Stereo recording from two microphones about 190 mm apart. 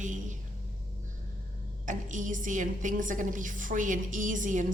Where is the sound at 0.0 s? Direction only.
40° right (ahead or behind).